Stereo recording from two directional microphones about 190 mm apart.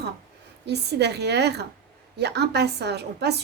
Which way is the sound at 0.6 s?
60° right (ahead or behind).